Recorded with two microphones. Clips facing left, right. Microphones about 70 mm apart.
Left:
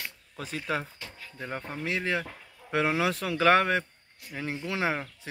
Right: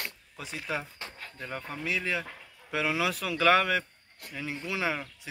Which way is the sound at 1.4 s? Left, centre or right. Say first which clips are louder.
Left 2 dB; left.